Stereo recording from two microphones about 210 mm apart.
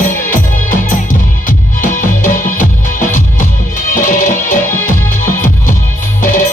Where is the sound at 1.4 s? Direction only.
40° left (ahead or behind).